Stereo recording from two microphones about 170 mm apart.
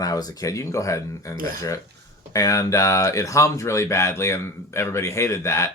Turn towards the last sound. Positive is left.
turn(degrees=15)  # may be behind; listen again after turning